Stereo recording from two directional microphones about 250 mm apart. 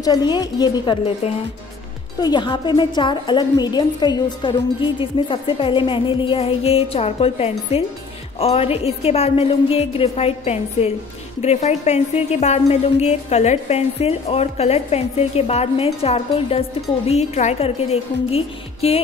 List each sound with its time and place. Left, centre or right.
0.0 s a woman's voice: centre